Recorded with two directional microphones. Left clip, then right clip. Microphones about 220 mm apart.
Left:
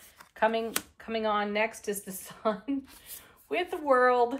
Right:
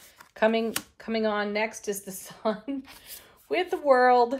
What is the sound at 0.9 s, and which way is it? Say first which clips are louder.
Speech: right 1 dB; 20° right (ahead or behind).